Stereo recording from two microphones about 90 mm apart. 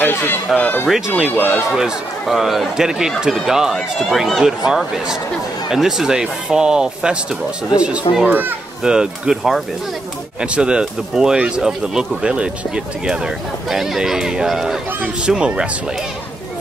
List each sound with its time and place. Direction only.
0.0 s speech: 20° left (ahead or behind)
0.8 s a man's voice: 5° right (ahead or behind)
1.2 s a man's voice: 15° right (ahead or behind)
8.8 s speech: 10° right (ahead or behind)